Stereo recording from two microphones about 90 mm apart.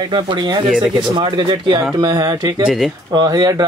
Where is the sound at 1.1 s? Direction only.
65° right (ahead or behind).